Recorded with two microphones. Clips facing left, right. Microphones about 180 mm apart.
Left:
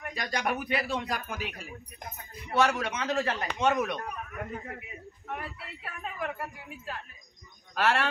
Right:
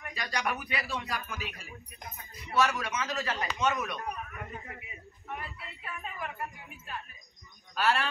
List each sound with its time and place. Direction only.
0.0 s a man's voice: 55° left (ahead or behind)
5.3 s a woman's voice: 70° left (ahead or behind)